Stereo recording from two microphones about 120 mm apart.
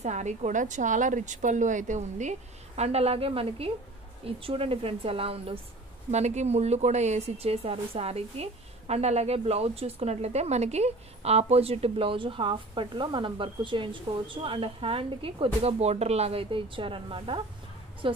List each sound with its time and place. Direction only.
0.0 s a woman's voice: 80° right; by 5.6 s 50° right (ahead or behind)
6.1 s a woman's voice: 70° right (ahead or behind); by 18.2 s 45° right (ahead or behind)